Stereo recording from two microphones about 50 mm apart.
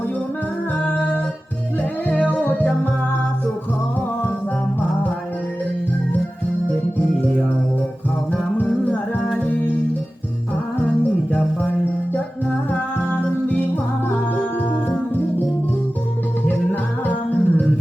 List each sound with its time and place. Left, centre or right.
1.8 s music: left
8.3 s music: left
13.5 s music: left
16.5 s music: left